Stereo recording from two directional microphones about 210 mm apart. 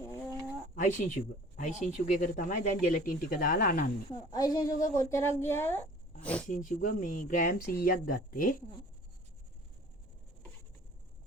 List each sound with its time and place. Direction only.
0.0 s a sound: 15° left (ahead or behind)
0.8 s speech: 40° left (ahead or behind)
4.3 s a woman's voice: 20° left (ahead or behind)
6.5 s speech: 40° left (ahead or behind)